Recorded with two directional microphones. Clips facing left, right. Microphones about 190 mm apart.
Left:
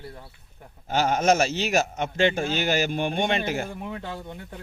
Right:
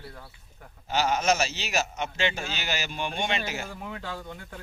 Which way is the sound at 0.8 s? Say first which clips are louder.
Left 4 dB; 50° left (ahead or behind).